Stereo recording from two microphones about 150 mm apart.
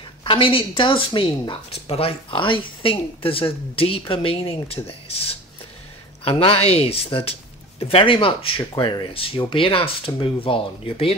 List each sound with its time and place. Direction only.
0.2 s speech: 35° left (ahead or behind)